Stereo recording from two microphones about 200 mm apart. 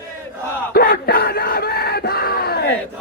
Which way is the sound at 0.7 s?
50° left (ahead or behind).